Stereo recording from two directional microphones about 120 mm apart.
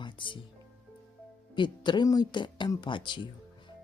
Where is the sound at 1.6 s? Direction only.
40° left (ahead or behind).